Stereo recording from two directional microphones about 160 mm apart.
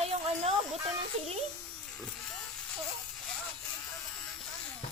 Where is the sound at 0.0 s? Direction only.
40° right (ahead or behind).